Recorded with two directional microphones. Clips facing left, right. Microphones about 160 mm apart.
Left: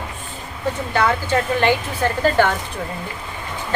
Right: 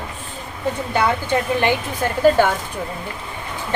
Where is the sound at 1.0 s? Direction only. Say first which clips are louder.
Left 1 dB; 15° right (ahead or behind).